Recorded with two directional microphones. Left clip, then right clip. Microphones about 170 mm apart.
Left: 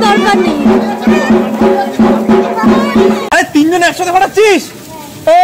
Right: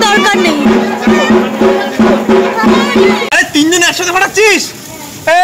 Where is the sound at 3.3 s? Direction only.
55° left (ahead or behind).